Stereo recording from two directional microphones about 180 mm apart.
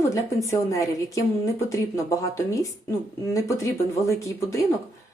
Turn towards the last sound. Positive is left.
turn(degrees=15)  # may be behind; listen again after turning